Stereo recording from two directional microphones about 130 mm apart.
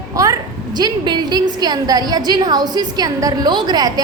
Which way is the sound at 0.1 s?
25° right (ahead or behind).